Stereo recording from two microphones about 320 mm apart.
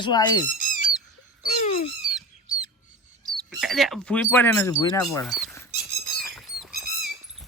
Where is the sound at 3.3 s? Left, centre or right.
Centre.